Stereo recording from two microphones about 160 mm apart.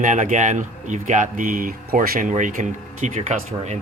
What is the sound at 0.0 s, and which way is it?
Speech, 50° right (ahead or behind).